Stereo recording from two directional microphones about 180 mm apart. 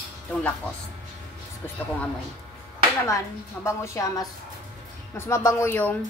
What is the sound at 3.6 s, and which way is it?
Speech, 15° left (ahead or behind).